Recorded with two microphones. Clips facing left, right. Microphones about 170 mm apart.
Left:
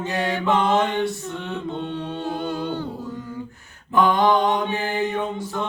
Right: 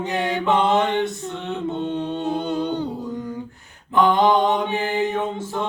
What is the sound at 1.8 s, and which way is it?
Music, 20° right (ahead or behind).